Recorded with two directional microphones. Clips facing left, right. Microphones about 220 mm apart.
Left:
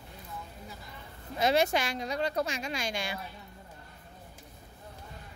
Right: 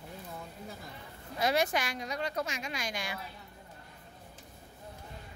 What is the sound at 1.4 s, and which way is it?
A woman's voice, 25° left (ahead or behind).